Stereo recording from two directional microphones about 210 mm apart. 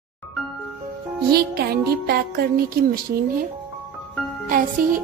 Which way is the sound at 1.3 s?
50° right (ahead or behind).